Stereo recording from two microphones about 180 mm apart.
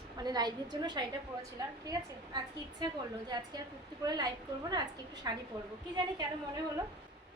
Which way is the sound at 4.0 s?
20° right (ahead or behind).